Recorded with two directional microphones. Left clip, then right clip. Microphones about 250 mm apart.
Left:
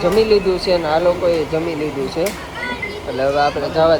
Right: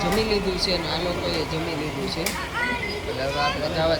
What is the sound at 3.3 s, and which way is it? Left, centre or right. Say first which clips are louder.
Speech: left 7 dB; left.